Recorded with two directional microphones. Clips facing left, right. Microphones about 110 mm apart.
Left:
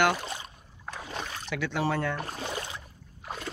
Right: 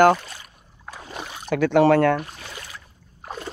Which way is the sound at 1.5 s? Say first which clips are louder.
Right 13 dB; 55° right (ahead or behind).